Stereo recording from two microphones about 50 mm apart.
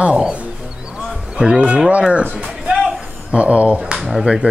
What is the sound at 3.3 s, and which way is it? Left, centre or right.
Speech, right.